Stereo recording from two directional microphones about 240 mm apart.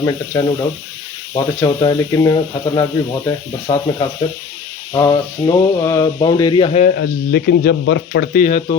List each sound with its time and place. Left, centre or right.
0.0 s speech: centre
4.9 s speech: centre
6.9 s speech: left